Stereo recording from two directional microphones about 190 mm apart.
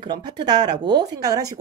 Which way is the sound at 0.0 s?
25° right (ahead or behind).